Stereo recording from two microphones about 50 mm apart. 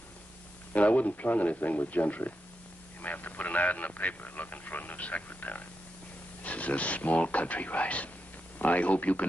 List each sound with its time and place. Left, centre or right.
0.7 s speech: left